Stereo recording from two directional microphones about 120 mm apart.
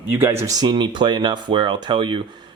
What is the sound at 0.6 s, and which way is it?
Speech, 35° right (ahead or behind).